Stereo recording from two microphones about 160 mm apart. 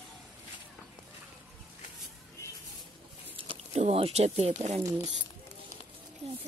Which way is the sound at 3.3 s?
35° right (ahead or behind).